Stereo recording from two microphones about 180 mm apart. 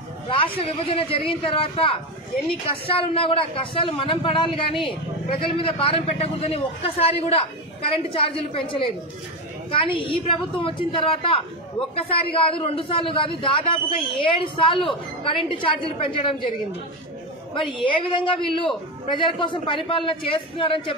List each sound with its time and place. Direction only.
0.3 s a man's voice: 30° left (ahead or behind)
17.8 s a man's voice: 30° left (ahead or behind)